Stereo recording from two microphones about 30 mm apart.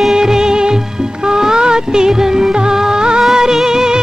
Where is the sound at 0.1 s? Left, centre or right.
Right.